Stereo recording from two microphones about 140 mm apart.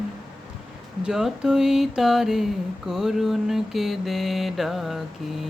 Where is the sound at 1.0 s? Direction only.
5° right (ahead or behind).